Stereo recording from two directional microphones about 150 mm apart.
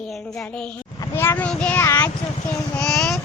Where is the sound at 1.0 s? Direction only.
20° left (ahead or behind).